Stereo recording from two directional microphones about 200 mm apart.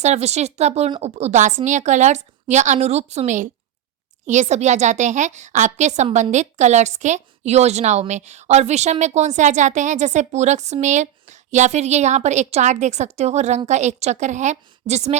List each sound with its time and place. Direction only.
0.0 s a woman's voice: 35° right (ahead or behind)